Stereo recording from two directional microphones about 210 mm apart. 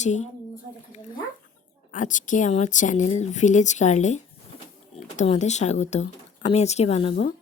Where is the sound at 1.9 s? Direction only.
35° left (ahead or behind).